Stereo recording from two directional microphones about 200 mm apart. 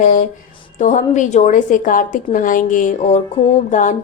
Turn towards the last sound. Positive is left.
turn(degrees=40)  # may be behind; listen again after turning